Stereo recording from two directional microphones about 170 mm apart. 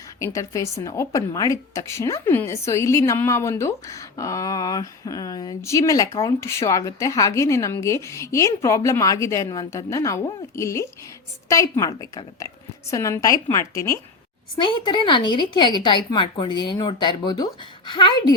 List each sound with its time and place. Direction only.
0.2 s a woman's voice: 20° left (ahead or behind)
14.5 s a woman's voice: 30° left (ahead or behind)